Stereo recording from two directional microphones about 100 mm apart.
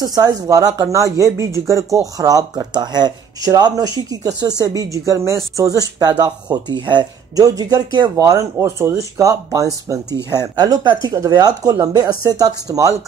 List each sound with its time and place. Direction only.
0.0 s speech: 40° right (ahead or behind)
8.2 s speech: 30° right (ahead or behind)